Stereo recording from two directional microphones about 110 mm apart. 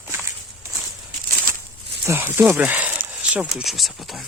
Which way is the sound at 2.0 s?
20° right (ahead or behind).